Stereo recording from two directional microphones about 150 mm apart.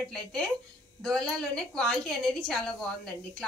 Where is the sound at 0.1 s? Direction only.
5° left (ahead or behind).